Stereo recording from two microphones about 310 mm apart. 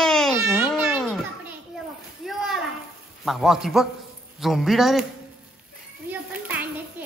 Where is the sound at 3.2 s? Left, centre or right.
Centre.